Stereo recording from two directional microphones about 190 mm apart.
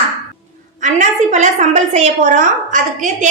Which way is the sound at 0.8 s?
40° right (ahead or behind).